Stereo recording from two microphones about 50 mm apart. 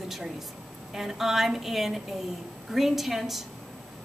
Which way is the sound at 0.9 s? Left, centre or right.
Centre.